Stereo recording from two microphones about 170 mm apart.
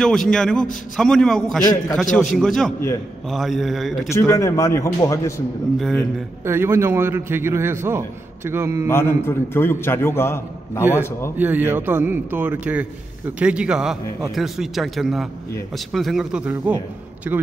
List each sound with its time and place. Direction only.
0.0 s speech: 5° left (ahead or behind)
4.1 s a man's voice: 15° left (ahead or behind)
5.8 s speech: 5° left (ahead or behind)
6.4 s a man's voice: 15° right (ahead or behind)
8.8 s a man's voice: 15° left (ahead or behind)
11.3 s a man's voice: 10° right (ahead or behind)